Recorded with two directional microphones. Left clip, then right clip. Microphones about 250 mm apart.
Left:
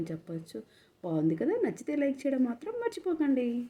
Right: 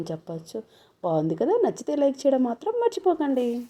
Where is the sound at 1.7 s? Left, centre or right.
Right.